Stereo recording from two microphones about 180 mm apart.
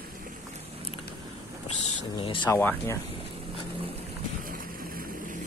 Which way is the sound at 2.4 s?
10° left (ahead or behind).